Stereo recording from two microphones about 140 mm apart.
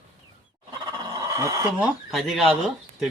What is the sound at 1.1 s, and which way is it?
Chicken, 25° right (ahead or behind).